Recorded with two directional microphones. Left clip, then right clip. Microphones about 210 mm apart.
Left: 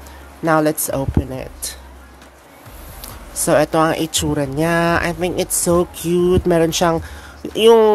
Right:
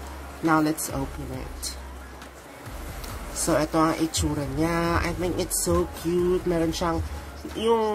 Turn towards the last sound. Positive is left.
turn(degrees=50)  # may be behind; listen again after turning